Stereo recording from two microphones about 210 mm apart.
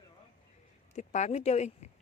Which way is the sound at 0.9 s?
35° left (ahead or behind).